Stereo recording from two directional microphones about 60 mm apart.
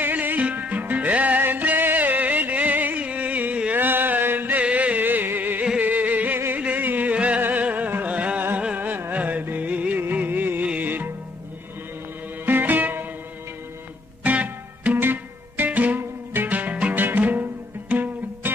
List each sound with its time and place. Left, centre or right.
0.0 s music: right
3.7 s a sound: right
4.6 s music: right
8.7 s carnatic music: right
9.7 s music: right
12.4 s music: right
14.2 s music: right